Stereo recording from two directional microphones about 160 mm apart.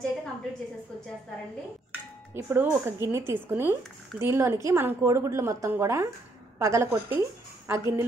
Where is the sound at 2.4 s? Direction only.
15° right (ahead or behind).